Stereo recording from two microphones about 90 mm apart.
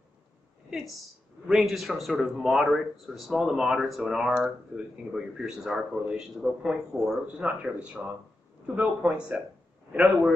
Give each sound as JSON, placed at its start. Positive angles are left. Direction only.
{"t": 1.5, "sound": "a man's voice", "side_deg": 0}